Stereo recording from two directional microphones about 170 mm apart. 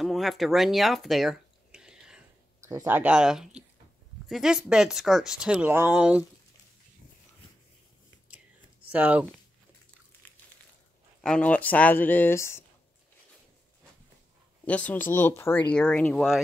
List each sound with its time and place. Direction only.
0.0 s a sound: centre (ahead or behind)
2.6 s speech: 15° right (ahead or behind)
8.9 s speech: 10° right (ahead or behind)
10.2 s a sound: 10° left (ahead or behind)
11.1 s speech: 5° left (ahead or behind)
14.7 s speech: 10° left (ahead or behind)